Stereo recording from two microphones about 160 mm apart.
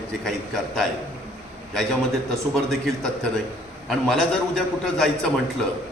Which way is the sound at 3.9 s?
Centre (ahead or behind).